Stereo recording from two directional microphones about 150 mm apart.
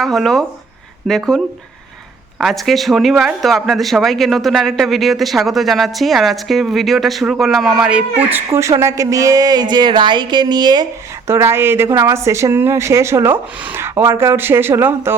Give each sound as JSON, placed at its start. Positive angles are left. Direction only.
{"t": 0.0, "sound": "speech", "side_deg": 0}
{"t": 2.4, "sound": "speech", "side_deg": 0}
{"t": 11.3, "sound": "speech", "side_deg": -15}